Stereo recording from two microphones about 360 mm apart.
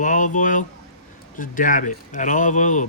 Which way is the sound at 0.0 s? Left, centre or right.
Left.